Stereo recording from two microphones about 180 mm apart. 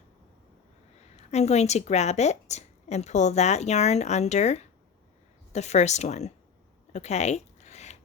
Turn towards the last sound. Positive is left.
turn(degrees=40)  # may be behind; listen again after turning